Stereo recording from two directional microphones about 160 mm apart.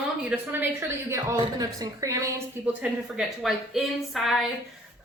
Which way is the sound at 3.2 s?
Centre (ahead or behind).